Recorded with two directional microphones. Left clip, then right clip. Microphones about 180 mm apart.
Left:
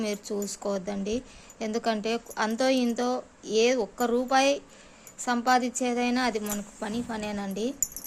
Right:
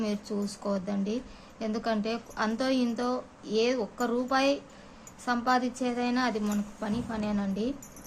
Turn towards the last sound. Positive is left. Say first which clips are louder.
# left 1 dB
turn(degrees=50)  # may be behind; listen again after turning